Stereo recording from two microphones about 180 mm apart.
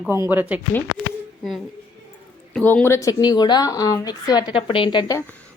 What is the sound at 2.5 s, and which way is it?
A woman's voice, 5° left (ahead or behind).